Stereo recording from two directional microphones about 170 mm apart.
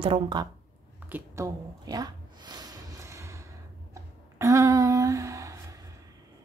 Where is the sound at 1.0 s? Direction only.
15° right (ahead or behind).